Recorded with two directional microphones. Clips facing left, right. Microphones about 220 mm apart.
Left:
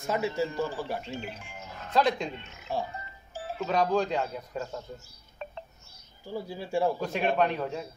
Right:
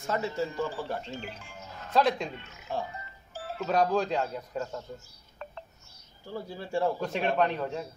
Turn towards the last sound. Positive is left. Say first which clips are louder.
# even
turn(degrees=5)  # may be behind; listen again after turning